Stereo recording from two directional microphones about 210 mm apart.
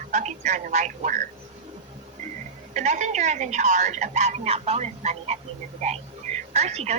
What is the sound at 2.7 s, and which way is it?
Speech, 35° right (ahead or behind).